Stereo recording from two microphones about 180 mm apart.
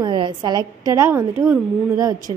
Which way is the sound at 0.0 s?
25° right (ahead or behind).